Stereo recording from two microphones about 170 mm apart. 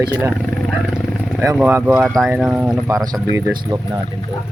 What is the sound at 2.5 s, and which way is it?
Speech, 10° right (ahead or behind).